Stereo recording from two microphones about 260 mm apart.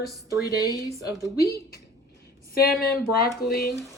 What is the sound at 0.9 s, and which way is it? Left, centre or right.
Speech, centre.